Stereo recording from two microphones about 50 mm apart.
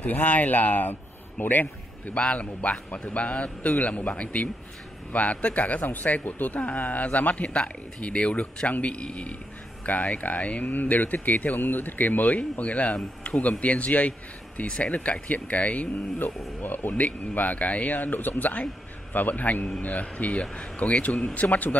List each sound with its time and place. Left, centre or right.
0.0 s speech: left
2.1 s a man's voice: left
16.6 s a man's voice: left